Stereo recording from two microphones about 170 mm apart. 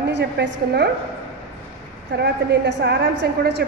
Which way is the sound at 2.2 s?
90° right.